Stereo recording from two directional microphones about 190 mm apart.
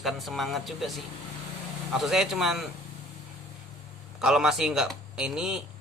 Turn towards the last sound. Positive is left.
turn(degrees=-5)  # may be behind; listen again after turning